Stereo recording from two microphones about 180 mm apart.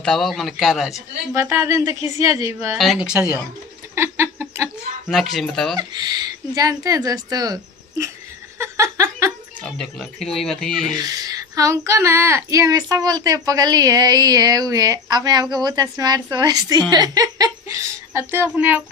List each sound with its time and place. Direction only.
0.0 s speech: centre (ahead or behind)
1.3 s speech: 15° right (ahead or behind)
2.7 s speech: centre (ahead or behind)
3.9 s a sound: 15° right (ahead or behind)
5.0 s speech: centre (ahead or behind)
5.7 s speech: 20° right (ahead or behind)
8.5 s a sound: 15° right (ahead or behind)
9.6 s speech: 5° left (ahead or behind)
10.9 s female singing: 20° right (ahead or behind)
16.9 s speech: 20° right (ahead or behind)